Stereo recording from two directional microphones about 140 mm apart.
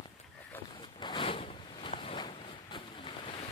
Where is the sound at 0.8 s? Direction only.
35° left (ahead or behind).